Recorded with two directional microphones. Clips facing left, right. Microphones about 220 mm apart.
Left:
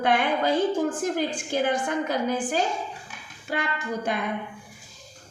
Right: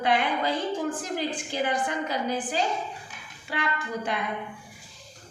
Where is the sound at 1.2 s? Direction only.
45° left (ahead or behind).